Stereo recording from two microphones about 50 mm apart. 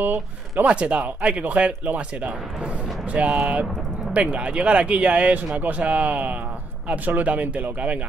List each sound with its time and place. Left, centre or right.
0.0 s speech: right
0.7 s speech: right